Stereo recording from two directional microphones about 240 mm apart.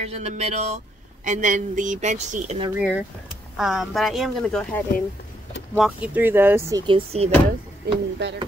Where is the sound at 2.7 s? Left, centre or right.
Centre; by 7.3 s right.